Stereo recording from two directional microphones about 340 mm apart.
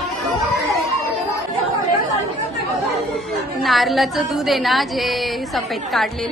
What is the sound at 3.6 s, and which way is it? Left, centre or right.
A woman's voice, centre.